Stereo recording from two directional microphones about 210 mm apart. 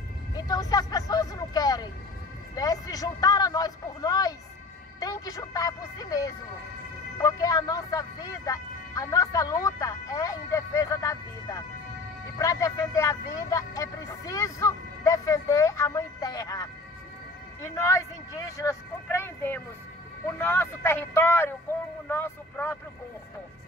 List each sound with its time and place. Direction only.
0.3 s speech: 20° left (ahead or behind)